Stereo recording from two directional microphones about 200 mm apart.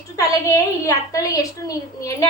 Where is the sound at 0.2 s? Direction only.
15° left (ahead or behind).